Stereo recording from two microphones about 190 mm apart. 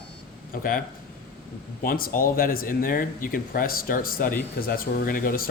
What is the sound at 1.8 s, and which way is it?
Speech, 50° left (ahead or behind).